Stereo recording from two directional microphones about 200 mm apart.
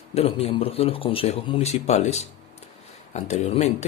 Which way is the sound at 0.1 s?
30° left (ahead or behind).